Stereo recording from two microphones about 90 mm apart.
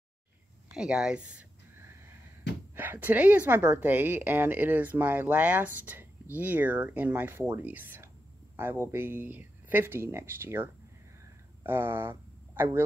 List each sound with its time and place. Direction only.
0.7 s speech: 10° right (ahead or behind)
2.7 s a woman's voice: 20° right (ahead or behind)